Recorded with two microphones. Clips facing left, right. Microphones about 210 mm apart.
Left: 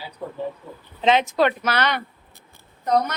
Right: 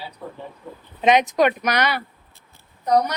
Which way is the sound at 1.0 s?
15° right (ahead or behind).